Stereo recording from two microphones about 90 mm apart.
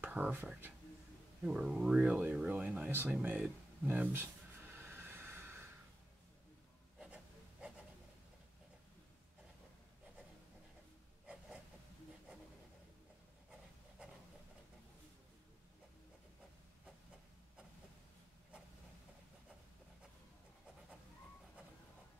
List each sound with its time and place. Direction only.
0.0 s speech: 20° right (ahead or behind)
1.4 s speech: 10° right (ahead or behind)
13.5 s writing: 10° right (ahead or behind)